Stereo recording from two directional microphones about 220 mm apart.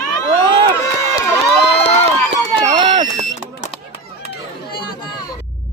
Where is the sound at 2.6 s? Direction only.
25° right (ahead or behind).